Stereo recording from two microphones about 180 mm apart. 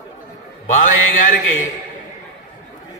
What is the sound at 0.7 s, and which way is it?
Speech, 45° left (ahead or behind).